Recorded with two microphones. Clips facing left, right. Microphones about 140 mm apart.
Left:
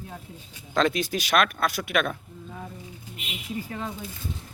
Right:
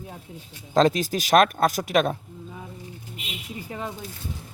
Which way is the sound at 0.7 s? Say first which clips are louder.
Right 4 dB; 40° right (ahead or behind).